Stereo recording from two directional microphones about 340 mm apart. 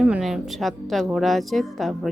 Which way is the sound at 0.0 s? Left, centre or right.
Centre.